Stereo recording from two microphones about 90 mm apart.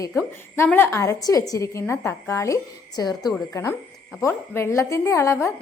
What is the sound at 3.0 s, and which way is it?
Speech, 50° left (ahead or behind).